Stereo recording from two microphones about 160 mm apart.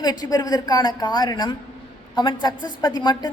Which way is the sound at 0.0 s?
25° left (ahead or behind).